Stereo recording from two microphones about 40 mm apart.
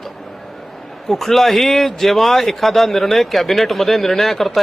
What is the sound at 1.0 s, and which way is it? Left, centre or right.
Speech, centre.